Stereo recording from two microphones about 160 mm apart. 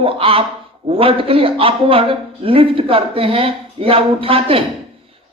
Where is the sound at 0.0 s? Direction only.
35° right (ahead or behind).